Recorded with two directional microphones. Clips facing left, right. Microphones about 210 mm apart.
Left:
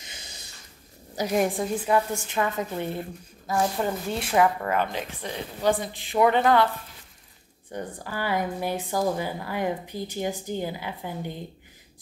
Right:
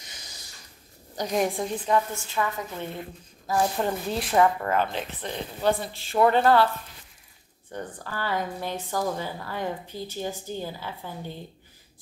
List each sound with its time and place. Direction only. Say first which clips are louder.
0.0 s snort: left 2 dB; 25° left (ahead or behind)
1.1 s speech: left 2 dB; 5° left (ahead or behind)
2.1 s a woman's voice: left 2 dB; 20° left (ahead or behind)
3.4 s speech: even; centre (ahead or behind)
4.3 s a woman's voice: even; 10° left (ahead or behind)
7.7 s a woman's voice: left 2 dB; 15° left (ahead or behind)